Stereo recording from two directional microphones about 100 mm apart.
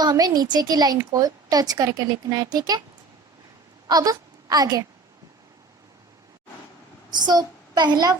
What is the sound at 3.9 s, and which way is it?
Speech, 40° right (ahead or behind).